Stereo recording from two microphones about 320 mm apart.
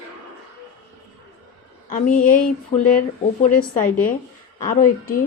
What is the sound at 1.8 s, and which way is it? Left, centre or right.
Speech, left.